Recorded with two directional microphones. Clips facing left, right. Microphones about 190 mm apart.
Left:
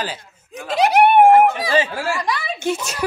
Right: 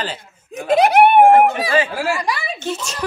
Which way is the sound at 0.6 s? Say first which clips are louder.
Right 3 dB; 55° right (ahead or behind).